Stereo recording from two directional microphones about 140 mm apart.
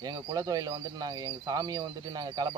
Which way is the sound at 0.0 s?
25° right (ahead or behind).